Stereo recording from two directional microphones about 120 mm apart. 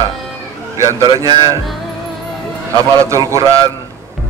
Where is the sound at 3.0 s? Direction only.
25° right (ahead or behind).